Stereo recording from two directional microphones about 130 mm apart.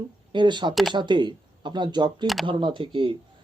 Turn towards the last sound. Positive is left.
turn(degrees=-40)  # may be behind; listen again after turning